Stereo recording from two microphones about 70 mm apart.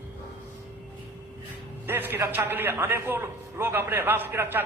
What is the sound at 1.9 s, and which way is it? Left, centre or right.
A man's voice, right.